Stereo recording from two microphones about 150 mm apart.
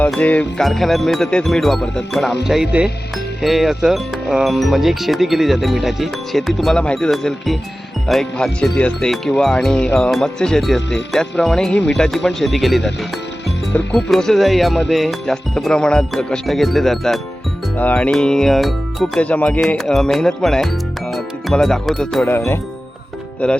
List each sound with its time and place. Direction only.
0.1 s speech: 10° left (ahead or behind)
22.3 s speech: 15° left (ahead or behind)